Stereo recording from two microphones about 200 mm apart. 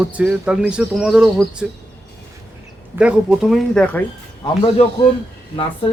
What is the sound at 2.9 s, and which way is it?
A man's voice, 5° right (ahead or behind).